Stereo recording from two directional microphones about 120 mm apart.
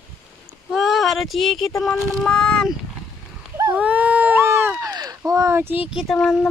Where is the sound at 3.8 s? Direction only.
10° right (ahead or behind).